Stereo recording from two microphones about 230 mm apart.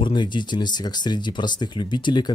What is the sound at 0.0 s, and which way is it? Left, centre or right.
Speech, centre.